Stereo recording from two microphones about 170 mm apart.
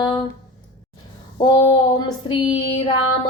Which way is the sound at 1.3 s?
30° left (ahead or behind).